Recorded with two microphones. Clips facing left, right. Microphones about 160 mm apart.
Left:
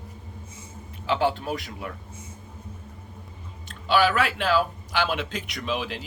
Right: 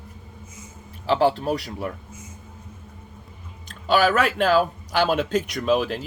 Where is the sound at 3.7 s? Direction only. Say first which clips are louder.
Right 2 dB; 45° right (ahead or behind).